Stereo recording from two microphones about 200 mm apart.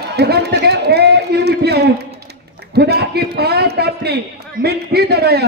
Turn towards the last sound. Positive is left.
turn(degrees=-55)  # may be behind; listen again after turning